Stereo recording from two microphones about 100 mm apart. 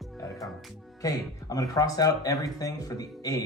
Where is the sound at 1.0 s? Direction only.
40° left (ahead or behind).